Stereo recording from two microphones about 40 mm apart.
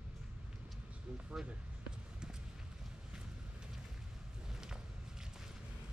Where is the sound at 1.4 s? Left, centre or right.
Right.